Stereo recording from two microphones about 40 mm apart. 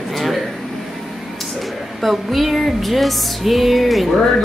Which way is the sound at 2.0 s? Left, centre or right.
Centre.